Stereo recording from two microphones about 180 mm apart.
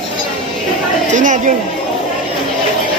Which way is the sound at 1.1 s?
45° right (ahead or behind).